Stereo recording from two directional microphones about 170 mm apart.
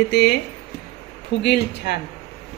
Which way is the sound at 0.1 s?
75° left (ahead or behind).